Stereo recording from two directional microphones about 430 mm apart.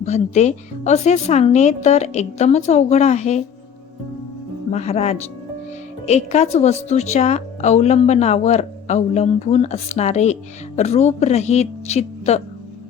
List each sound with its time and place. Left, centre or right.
0.0 s a woman's voice: centre
4.7 s a woman's voice: centre